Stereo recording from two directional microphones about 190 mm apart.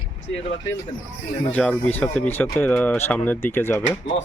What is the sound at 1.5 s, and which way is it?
Speech, 5° left (ahead or behind).